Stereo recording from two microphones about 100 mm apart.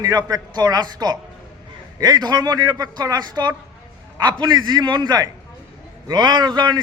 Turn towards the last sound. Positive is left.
turn(degrees=-45)  # may be behind; listen again after turning